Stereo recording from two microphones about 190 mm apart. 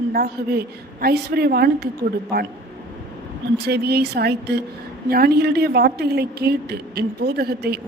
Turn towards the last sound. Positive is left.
turn(degrees=-55)  # may be behind; listen again after turning